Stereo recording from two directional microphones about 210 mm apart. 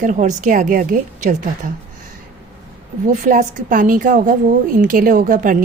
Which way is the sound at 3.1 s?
35° right (ahead or behind).